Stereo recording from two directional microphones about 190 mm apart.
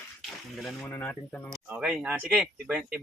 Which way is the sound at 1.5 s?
5° right (ahead or behind).